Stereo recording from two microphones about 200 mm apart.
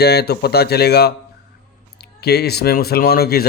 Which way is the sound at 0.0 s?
55° left (ahead or behind).